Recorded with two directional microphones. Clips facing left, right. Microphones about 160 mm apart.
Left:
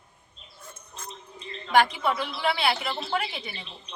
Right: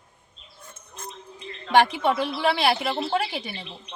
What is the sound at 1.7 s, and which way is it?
A woman's voice, 30° right (ahead or behind).